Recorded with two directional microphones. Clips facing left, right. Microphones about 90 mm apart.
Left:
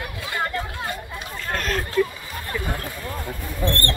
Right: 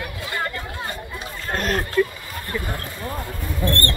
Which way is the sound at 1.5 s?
35° right (ahead or behind).